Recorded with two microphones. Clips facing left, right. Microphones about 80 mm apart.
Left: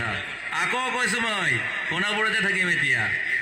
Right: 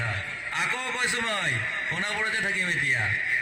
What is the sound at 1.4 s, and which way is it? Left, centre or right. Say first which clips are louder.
A man's voice: left 3 dB; left.